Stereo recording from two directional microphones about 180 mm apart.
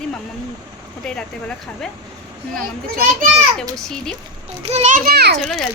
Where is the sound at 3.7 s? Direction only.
5° left (ahead or behind).